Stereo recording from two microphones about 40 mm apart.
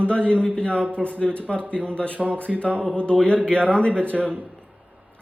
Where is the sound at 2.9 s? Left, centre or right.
Left.